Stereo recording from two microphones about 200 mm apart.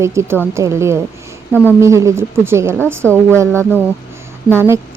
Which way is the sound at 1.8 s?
15° right (ahead or behind).